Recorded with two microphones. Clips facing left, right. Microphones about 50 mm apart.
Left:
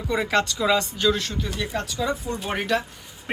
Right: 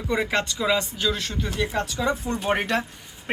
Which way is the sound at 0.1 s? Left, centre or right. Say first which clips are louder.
Left 2 dB; centre.